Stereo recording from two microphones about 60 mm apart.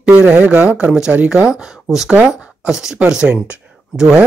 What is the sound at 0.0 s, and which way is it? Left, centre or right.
Speech, centre.